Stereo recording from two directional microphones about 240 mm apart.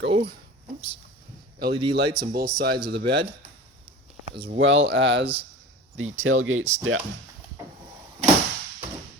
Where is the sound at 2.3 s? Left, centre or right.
Right.